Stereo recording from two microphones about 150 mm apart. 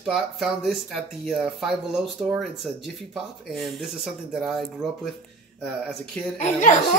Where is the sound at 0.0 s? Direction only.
5° right (ahead or behind).